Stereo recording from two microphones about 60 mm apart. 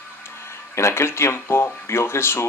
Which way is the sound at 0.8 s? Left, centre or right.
Left.